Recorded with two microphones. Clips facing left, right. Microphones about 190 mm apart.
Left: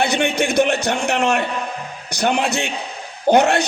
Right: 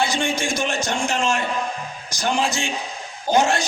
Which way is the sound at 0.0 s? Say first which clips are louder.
Left 4 dB; 65° left (ahead or behind).